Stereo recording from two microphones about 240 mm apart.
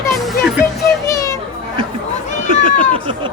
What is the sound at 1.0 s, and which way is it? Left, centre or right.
Children playing, centre.